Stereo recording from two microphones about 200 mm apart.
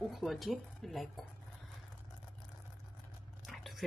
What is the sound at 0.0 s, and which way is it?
Speech, centre (ahead or behind).